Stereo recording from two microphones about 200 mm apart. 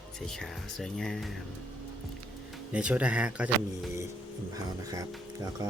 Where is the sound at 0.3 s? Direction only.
Centre (ahead or behind).